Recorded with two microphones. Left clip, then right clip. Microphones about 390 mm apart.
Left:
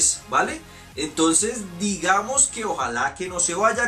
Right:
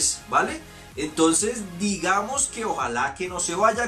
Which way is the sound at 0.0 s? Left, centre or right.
Centre.